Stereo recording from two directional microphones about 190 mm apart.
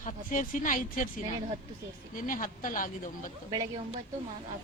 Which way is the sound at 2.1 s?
45° left (ahead or behind).